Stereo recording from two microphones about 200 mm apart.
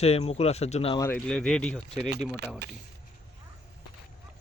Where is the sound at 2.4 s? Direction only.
55° right (ahead or behind).